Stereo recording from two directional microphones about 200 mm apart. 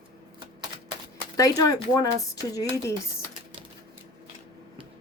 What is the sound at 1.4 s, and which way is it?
Speech, 20° left (ahead or behind).